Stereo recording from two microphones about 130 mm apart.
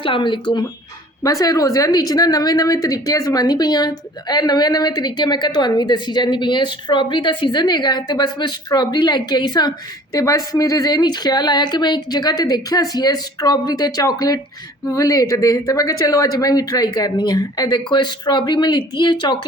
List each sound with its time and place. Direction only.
0.0 s speech: 40° left (ahead or behind)
1.2 s speech: 25° left (ahead or behind)